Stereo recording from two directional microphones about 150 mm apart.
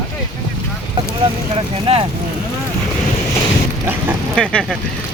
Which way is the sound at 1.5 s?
35° right (ahead or behind).